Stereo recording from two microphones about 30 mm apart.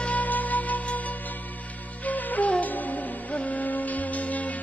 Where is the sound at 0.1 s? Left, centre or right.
Left.